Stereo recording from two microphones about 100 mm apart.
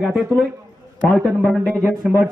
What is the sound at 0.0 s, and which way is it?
Speech, 5° right (ahead or behind).